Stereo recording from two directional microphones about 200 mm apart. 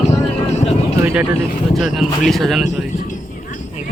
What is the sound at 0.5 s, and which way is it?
Speech, 30° left (ahead or behind).